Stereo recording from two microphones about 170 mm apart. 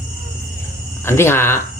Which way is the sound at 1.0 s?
15° left (ahead or behind).